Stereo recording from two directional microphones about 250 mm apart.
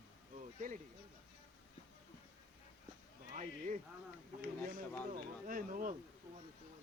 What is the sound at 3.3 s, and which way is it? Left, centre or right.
Speech, right.